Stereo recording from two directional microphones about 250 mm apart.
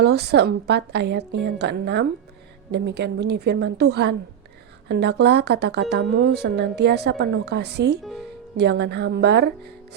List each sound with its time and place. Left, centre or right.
0.0 s speech: right